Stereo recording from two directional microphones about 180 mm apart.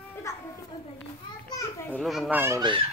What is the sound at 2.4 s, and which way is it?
Speech, 20° right (ahead or behind).